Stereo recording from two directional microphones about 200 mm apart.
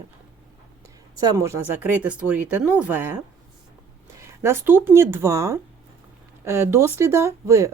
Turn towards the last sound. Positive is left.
turn(degrees=-15)  # may be behind; listen again after turning